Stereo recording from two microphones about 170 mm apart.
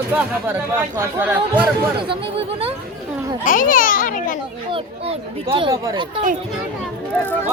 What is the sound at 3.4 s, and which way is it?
Speech, 55° left (ahead or behind).